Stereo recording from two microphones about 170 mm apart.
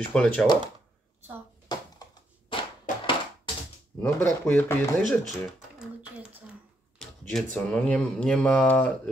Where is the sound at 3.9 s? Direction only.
10° left (ahead or behind).